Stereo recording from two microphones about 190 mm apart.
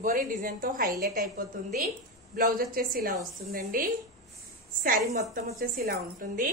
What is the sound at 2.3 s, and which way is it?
Speech, 50° right (ahead or behind).